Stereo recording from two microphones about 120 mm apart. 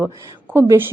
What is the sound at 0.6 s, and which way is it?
Speech, 20° right (ahead or behind).